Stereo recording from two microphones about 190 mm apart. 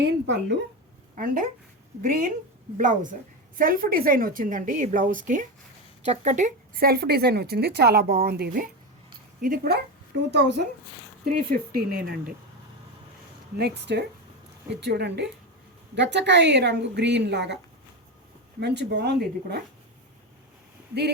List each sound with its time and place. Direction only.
0.0 s speech: 65° right (ahead or behind)
1.1 s speech: 45° right (ahead or behind)
11.3 s speech: 55° right (ahead or behind)
13.6 s a woman's voice: 60° right (ahead or behind)
18.6 s a woman's voice: 65° right (ahead or behind)